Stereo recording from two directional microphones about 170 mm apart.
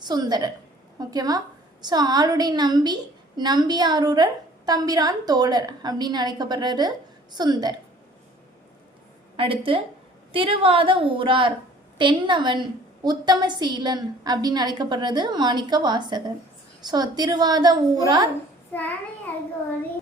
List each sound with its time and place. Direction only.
0.0 s a woman's voice: 25° right (ahead or behind)
9.3 s a woman's voice: 30° right (ahead or behind)
18.7 s a child's voice: 10° left (ahead or behind)